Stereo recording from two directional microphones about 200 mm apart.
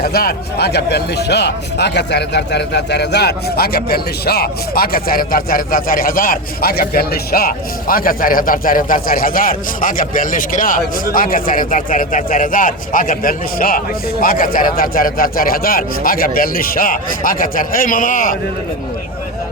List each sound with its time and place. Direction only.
0.0 s a man's voice: 50° left (ahead or behind)